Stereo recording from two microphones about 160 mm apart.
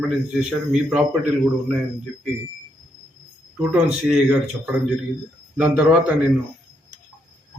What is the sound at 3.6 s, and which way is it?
Speech, 5° right (ahead or behind).